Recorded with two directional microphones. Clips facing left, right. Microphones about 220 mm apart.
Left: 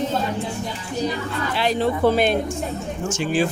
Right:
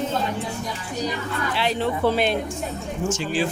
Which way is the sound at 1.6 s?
45° left (ahead or behind).